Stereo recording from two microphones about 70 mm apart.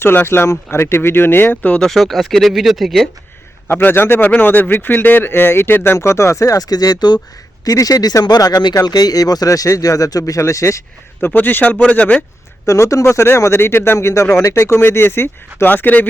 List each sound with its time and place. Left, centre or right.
0.0 s speech: left
1.6 s speech: centre
1.9 s speech: centre
3.7 s speech: left
7.6 s speech: left
11.3 s a man's voice: left
12.6 s speech: left